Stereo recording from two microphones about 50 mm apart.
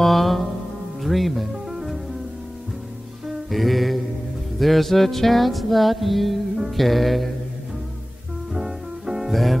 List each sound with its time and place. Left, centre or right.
0.0 s music: centre
3.3 s music: centre
8.5 s music: centre
9.3 s music: centre